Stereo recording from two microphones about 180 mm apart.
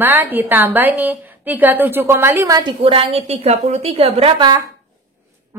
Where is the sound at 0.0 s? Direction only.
10° right (ahead or behind).